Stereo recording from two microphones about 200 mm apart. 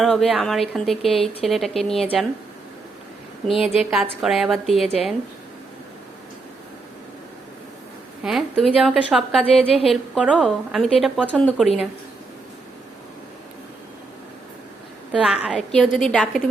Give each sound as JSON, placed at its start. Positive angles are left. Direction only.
{"t": 0.0, "sound": "a woman's voice", "side_deg": 0}
{"t": 3.5, "sound": "a woman's voice", "side_deg": 30}
{"t": 3.9, "sound": "a woman's voice", "side_deg": 0}
{"t": 8.2, "sound": "a woman's voice", "side_deg": 0}
{"t": 15.1, "sound": "a woman's voice", "side_deg": -5}